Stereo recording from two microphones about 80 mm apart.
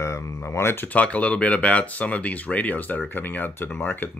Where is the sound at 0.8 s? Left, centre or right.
Centre.